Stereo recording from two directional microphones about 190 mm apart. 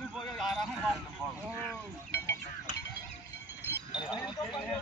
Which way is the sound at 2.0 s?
15° left (ahead or behind).